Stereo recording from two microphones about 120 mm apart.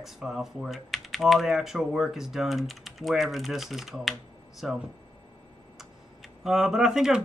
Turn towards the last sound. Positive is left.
turn(degrees=-5)  # may be behind; listen again after turning